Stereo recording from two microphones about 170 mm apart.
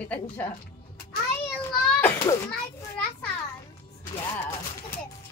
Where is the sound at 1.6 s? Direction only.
15° left (ahead or behind).